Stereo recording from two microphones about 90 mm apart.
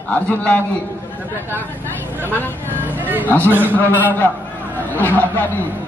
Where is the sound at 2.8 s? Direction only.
20° right (ahead or behind).